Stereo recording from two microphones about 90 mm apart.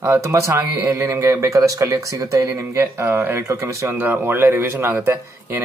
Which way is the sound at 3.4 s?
35° right (ahead or behind).